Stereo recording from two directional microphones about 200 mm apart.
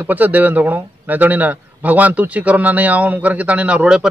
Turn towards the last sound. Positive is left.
turn(degrees=-5)  # may be behind; listen again after turning